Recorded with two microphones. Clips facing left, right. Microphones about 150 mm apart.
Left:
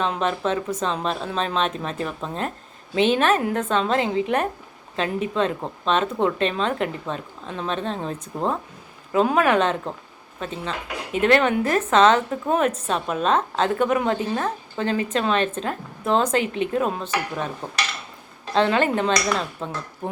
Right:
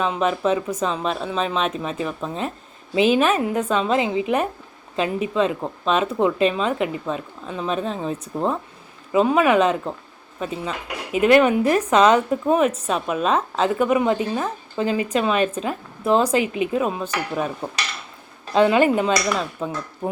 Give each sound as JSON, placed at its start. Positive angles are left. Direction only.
{"t": 0.0, "sound": "speech", "side_deg": -5}
{"t": 9.1, "sound": "a woman's voice", "side_deg": 0}
{"t": 18.5, "sound": "a woman's voice", "side_deg": -10}